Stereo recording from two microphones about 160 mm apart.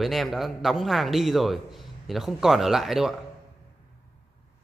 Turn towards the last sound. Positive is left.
turn(degrees=0)  # may be behind; listen again after turning